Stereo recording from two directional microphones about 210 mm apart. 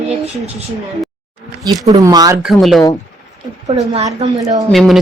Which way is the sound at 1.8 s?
15° right (ahead or behind).